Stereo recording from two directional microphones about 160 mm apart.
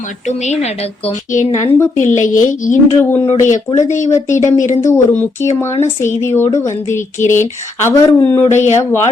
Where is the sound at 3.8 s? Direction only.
50° left (ahead or behind).